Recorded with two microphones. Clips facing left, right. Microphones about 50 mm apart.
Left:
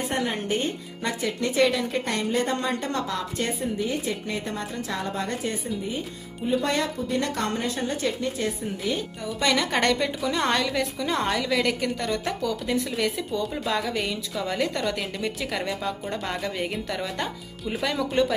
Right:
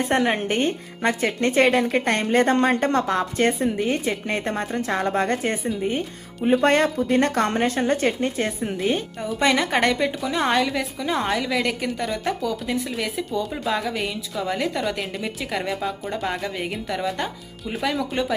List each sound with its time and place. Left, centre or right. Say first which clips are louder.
0.1 s speech: right 6 dB; right
9.4 s a woman's voice: right 3 dB; right
9.7 s a woman's voice: right 3 dB; centre